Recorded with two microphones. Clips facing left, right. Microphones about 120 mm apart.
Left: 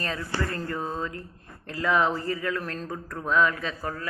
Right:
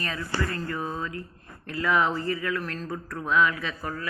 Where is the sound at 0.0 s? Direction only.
35° left (ahead or behind).